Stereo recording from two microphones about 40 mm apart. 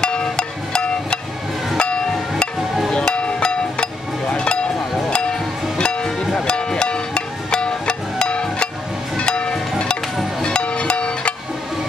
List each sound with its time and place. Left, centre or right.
0.0 s music: left
9.1 s train: left
10.4 s music: left